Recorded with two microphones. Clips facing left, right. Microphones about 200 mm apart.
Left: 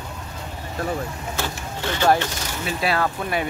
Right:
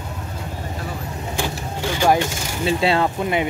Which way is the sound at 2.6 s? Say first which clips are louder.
Right 5 dB; 25° right (ahead or behind).